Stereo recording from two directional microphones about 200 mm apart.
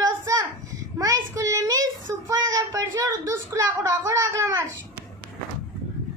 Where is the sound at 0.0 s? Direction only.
15° right (ahead or behind).